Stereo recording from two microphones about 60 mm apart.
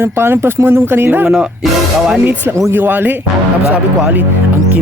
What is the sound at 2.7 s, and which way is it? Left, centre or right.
Speech, right.